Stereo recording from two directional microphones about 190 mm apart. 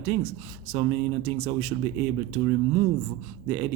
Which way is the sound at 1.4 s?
35° right (ahead or behind).